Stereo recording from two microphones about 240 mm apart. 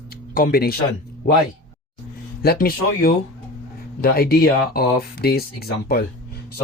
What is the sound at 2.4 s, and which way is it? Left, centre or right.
Speech, left.